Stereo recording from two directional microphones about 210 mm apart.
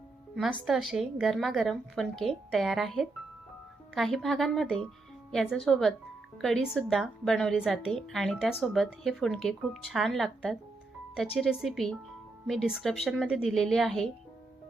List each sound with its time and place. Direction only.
0.6 s a woman's voice: centre (ahead or behind)